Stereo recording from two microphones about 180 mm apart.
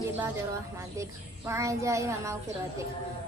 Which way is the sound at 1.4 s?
15° right (ahead or behind).